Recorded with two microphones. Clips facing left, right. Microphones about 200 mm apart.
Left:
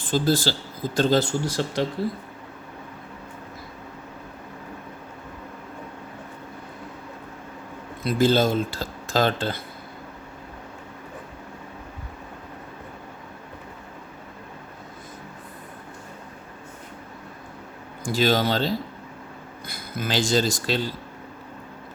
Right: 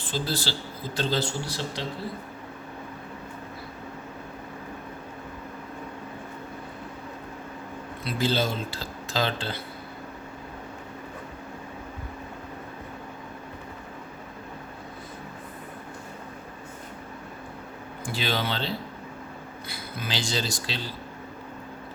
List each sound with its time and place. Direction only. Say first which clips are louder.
0.1 s speech: left 8 dB; 45° left (ahead or behind)
8.0 s speech: left 7 dB; 45° left (ahead or behind)
18.1 s speech: left 8 dB; 45° left (ahead or behind)